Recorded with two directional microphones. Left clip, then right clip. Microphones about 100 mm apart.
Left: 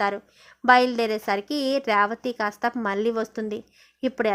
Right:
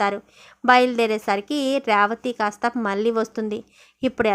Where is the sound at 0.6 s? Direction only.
5° right (ahead or behind).